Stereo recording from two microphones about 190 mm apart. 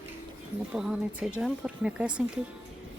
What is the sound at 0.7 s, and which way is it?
Speech, 5° right (ahead or behind).